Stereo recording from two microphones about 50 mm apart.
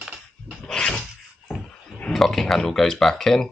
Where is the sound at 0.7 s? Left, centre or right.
Centre.